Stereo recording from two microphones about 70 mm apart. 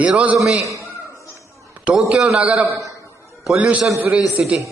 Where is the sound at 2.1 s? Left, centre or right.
Centre.